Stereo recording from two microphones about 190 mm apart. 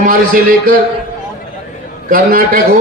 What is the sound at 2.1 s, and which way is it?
Speech, 50° right (ahead or behind).